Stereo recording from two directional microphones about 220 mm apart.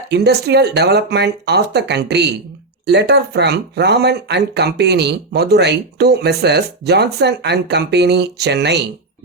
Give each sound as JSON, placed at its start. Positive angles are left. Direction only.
{"t": 0.1, "sound": "speech", "side_deg": -50}